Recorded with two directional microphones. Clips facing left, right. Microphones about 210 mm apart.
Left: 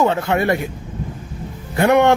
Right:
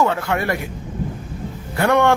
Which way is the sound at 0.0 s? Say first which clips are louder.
Left 3 dB; 20° left (ahead or behind).